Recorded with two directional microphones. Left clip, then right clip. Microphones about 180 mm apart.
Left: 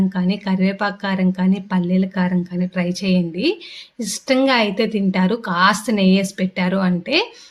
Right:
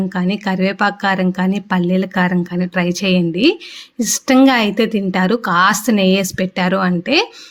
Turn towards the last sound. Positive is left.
turn(degrees=-35)  # may be behind; listen again after turning